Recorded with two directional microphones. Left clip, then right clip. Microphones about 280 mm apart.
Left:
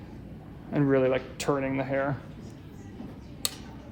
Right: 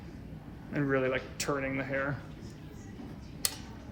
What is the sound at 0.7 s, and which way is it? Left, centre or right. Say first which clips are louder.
Speech: left 6 dB; left.